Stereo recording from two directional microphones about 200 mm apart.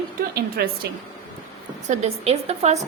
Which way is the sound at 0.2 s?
50° right (ahead or behind).